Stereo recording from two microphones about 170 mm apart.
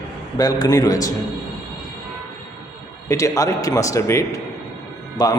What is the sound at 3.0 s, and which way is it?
A man's voice, 20° left (ahead or behind).